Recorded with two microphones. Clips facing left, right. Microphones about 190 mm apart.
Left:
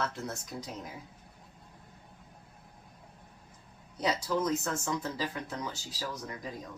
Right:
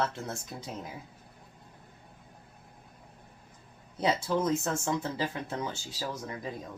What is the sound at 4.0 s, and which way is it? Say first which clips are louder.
Speech: right 2 dB; 25° right (ahead or behind).